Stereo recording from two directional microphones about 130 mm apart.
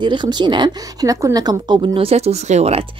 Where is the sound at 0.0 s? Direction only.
35° right (ahead or behind).